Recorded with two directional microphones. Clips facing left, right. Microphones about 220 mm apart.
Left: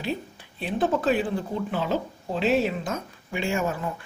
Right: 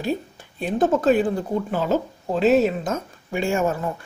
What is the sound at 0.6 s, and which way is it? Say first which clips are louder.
Speech: right 5 dB; 45° right (ahead or behind).